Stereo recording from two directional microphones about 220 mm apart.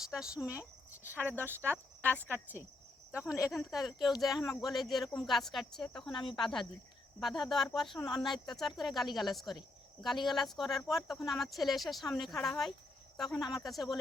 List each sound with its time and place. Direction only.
0.3 s speech: 15° left (ahead or behind)
1.0 s speech: 10° right (ahead or behind)
1.6 s speech: centre (ahead or behind)
3.2 s speech: 15° left (ahead or behind)
3.5 s speech: centre (ahead or behind)
6.1 s speech: 20° left (ahead or behind)
6.3 s speech: centre (ahead or behind)